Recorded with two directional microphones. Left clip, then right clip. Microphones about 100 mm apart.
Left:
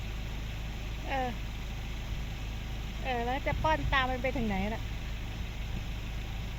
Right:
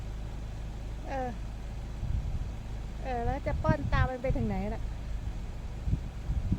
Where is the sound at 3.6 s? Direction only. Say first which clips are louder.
Left 4 dB; 15° right (ahead or behind).